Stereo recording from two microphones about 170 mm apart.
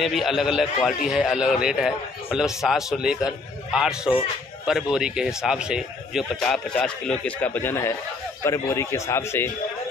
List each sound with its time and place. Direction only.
0.0 s a man's voice: centre (ahead or behind); by 9.5 s 15° left (ahead or behind)